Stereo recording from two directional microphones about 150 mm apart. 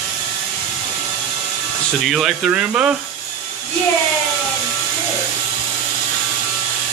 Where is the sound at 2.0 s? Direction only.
Centre (ahead or behind).